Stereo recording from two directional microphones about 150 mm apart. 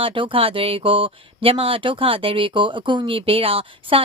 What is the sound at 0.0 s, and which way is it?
Speech, 35° right (ahead or behind).